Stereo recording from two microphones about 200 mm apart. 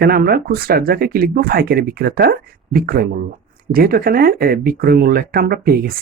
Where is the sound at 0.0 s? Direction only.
50° right (ahead or behind).